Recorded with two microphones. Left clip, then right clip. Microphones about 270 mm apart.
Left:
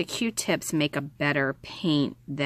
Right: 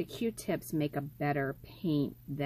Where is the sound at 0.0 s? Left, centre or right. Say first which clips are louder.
Left 7 dB; left.